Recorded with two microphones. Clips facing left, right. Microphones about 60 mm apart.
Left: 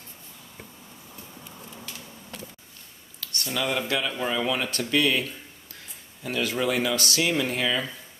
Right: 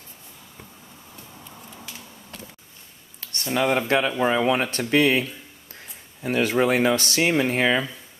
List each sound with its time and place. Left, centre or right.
3.2 s speech: right
6.2 s speech: right